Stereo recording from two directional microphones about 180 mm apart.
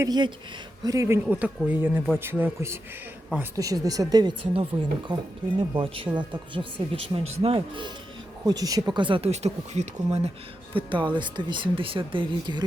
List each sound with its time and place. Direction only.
0.0 s speech: 25° right (ahead or behind)
8.4 s speech: 20° right (ahead or behind)